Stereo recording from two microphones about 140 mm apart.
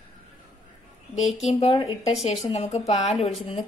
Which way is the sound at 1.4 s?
45° left (ahead or behind).